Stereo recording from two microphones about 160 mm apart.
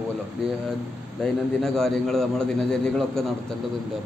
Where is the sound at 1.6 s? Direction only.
Centre (ahead or behind).